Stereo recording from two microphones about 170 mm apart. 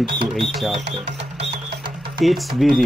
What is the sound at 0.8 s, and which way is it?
Music, 90° right.